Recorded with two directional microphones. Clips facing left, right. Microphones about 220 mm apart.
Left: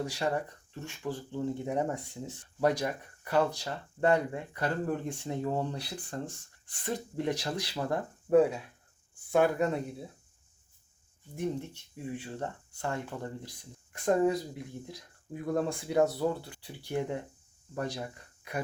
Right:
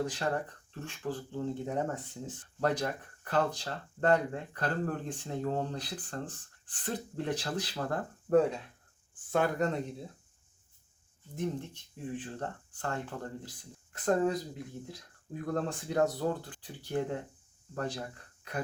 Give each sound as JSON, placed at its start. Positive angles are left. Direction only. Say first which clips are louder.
{"t": 0.0, "sound": "speech", "louder": "left 1 dB", "side_deg": 10}
{"t": 11.3, "sound": "speech", "louder": "left 2 dB", "side_deg": 10}
{"t": 15.4, "sound": "speech", "louder": "left 3 dB", "side_deg": 10}